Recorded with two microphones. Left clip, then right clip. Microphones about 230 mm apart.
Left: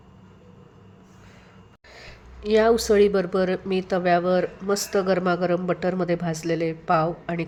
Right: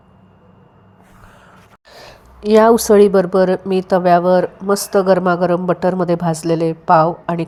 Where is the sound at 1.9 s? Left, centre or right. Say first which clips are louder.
Right 5 dB; right.